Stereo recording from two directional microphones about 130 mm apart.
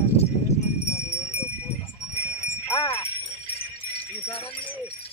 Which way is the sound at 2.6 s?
20° left (ahead or behind).